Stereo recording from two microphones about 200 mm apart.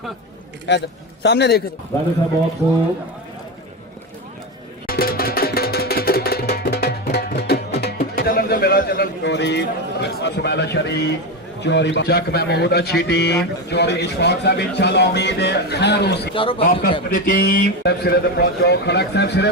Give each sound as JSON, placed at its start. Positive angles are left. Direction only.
{"t": 0.7, "sound": "a man's voice", "side_deg": 60}
{"t": 4.9, "sound": "music", "side_deg": 50}
{"t": 11.6, "sound": "a man's voice", "side_deg": 60}
{"t": 16.3, "sound": "a man's voice", "side_deg": 25}
{"t": 17.1, "sound": "a man's voice", "side_deg": 45}